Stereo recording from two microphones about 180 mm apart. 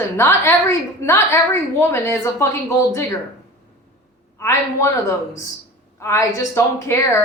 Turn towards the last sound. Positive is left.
turn(degrees=15)  # may be behind; listen again after turning